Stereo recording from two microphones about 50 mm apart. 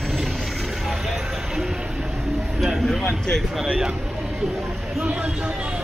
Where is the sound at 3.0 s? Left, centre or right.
Centre.